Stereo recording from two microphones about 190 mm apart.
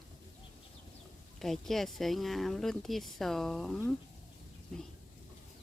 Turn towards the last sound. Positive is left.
turn(degrees=5)  # may be behind; listen again after turning